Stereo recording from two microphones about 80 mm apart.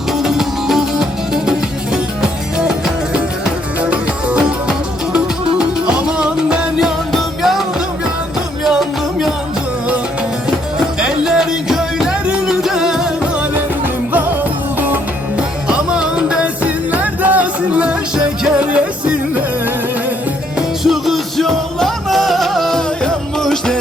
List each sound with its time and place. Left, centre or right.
0.1 s music: centre
8.6 s music: centre
11.0 s music: centre
15.4 s music: centre
18.6 s a sound: centre
20.8 s music: centre